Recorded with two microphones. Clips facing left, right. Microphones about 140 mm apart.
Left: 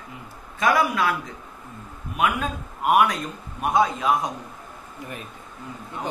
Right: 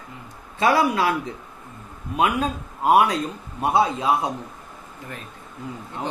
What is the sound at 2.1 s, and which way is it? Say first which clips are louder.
A man's voice: right 3 dB; 30° right (ahead or behind).